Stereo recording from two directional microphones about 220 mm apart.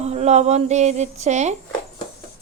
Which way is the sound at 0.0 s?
30° right (ahead or behind).